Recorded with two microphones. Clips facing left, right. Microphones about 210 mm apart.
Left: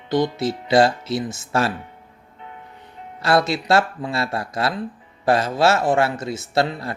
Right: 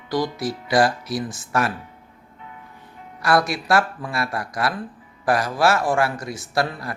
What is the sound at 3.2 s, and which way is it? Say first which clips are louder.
A man's voice: left 1 dB; 25° left (ahead or behind).